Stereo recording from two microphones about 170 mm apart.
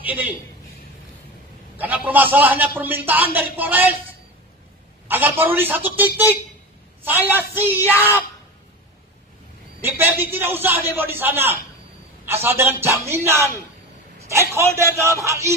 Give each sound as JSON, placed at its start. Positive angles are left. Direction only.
{"t": 0.0, "sound": "speech", "side_deg": -10}
{"t": 1.8, "sound": "a man's voice", "side_deg": -10}
{"t": 5.0, "sound": "a man's voice", "side_deg": -10}
{"t": 9.8, "sound": "a man's voice", "side_deg": -15}